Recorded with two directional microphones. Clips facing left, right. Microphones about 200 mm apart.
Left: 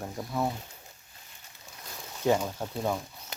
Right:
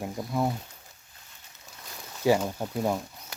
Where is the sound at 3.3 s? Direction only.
20° left (ahead or behind).